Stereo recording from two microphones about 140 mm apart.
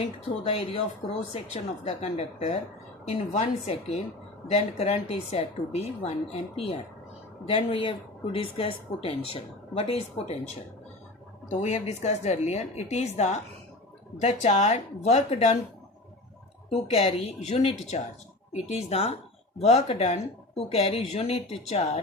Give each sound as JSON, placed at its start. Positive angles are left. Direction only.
{"t": 0.0, "sound": "speech", "side_deg": 45}
{"t": 7.4, "sound": "a woman's voice", "side_deg": 40}
{"t": 11.4, "sound": "speech", "side_deg": 55}
{"t": 16.6, "sound": "speech", "side_deg": 50}